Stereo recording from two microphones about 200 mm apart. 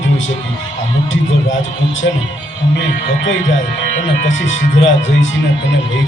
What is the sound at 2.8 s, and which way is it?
Speech, 70° left (ahead or behind).